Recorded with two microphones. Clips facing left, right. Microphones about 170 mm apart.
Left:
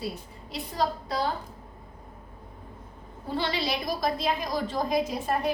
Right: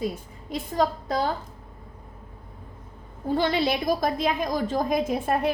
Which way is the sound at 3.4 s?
50° right (ahead or behind).